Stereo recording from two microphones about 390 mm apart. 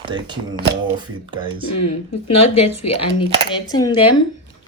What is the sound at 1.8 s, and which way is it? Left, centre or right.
Speech, left.